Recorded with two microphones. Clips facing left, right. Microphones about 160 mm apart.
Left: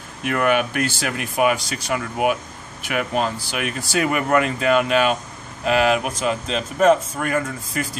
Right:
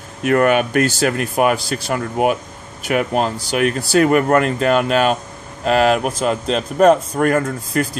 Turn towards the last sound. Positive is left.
turn(degrees=-55)  # may be behind; listen again after turning